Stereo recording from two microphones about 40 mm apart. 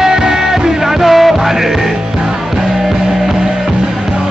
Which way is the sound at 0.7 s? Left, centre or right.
Centre.